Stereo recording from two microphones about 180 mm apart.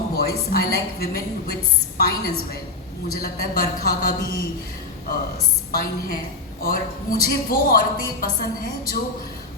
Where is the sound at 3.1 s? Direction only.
55° left (ahead or behind).